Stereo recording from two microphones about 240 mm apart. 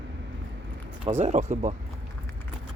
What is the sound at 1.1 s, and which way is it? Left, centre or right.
Speech, right.